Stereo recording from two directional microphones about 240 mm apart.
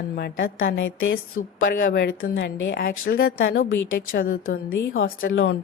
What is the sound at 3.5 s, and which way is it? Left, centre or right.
A woman's voice, left.